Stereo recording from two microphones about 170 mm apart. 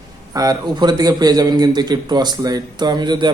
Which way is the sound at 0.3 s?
25° right (ahead or behind).